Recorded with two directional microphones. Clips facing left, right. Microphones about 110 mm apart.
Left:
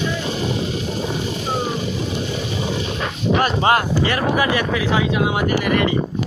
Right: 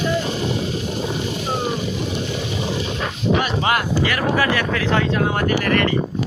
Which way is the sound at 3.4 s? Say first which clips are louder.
Left 3 dB; 30° left (ahead or behind).